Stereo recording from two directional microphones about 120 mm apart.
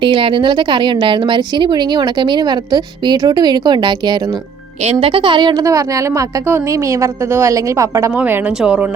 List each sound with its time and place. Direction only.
0.0 s speech: 45° right (ahead or behind)
4.8 s a woman's voice: 55° right (ahead or behind); by 5.6 s 40° right (ahead or behind)
5.6 s a woman's voice: 25° right (ahead or behind)
8.1 s speech: 10° right (ahead or behind)